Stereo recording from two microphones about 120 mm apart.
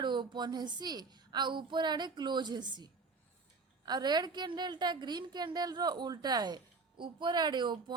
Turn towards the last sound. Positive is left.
turn(degrees=-40)  # may be behind; listen again after turning